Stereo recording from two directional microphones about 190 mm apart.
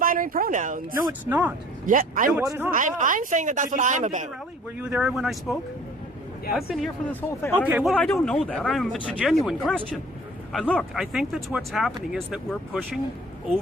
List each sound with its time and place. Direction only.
0.0 s speech: 45° right (ahead or behind)
1.2 s speech: 10° right (ahead or behind)
1.9 s speech: 45° right (ahead or behind)
2.4 s speech: 15° right (ahead or behind)
2.7 s a woman's voice: 40° right (ahead or behind)
4.8 s speech: 5° right (ahead or behind)
7.1 s speech: 10° left (ahead or behind)
7.7 s speech: 10° right (ahead or behind)
7.9 s speech: 5° left (ahead or behind)